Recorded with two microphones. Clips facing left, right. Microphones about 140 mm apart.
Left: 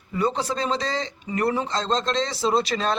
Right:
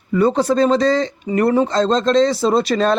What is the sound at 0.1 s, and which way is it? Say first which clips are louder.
A man's voice: right 9 dB; 50° right (ahead or behind).